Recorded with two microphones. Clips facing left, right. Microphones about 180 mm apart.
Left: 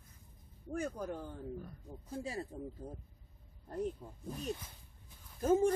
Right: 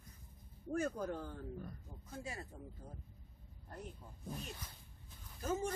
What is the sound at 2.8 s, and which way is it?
Speech, 30° left (ahead or behind).